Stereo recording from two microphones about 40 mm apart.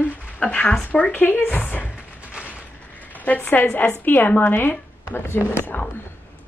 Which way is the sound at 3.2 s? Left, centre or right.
Left.